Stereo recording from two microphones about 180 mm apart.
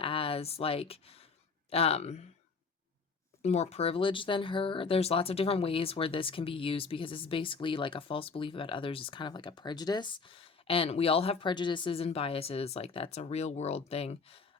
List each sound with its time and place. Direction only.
0.0 s a sound: 30° left (ahead or behind)
1.7 s speech: 35° left (ahead or behind)
3.4 s speech: 35° left (ahead or behind)